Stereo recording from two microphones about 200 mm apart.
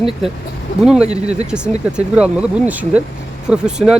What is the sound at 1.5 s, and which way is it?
Speech, 5° right (ahead or behind).